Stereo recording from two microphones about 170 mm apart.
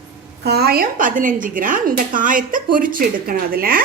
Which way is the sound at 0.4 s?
70° right (ahead or behind).